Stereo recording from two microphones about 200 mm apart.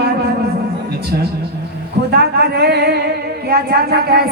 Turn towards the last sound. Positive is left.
turn(degrees=-50)  # may be behind; listen again after turning